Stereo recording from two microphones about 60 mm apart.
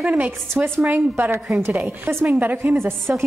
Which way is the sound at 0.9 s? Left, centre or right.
Right.